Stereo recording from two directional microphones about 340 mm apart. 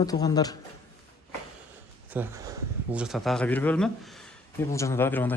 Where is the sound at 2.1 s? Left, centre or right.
Centre.